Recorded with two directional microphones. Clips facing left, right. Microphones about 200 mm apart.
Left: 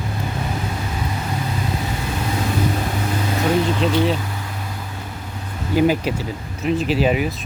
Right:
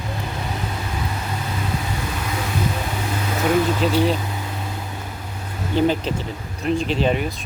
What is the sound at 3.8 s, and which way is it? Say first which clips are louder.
Speech: even; centre (ahead or behind).